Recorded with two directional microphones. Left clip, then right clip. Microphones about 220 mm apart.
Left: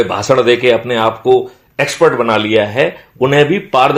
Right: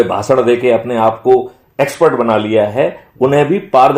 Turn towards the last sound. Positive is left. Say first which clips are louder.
# right 2 dB
turn(degrees=30)  # may be behind; listen again after turning